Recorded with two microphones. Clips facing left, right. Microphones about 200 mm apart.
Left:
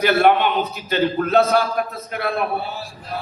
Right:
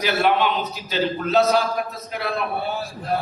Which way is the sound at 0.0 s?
55° left (ahead or behind).